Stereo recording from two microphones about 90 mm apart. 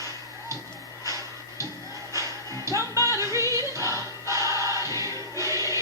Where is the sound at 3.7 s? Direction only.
35° right (ahead or behind).